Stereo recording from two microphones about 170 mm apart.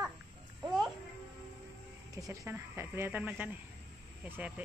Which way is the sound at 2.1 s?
20° right (ahead or behind).